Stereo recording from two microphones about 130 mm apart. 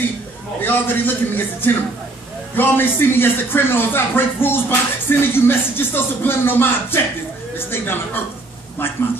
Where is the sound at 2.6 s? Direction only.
15° left (ahead or behind).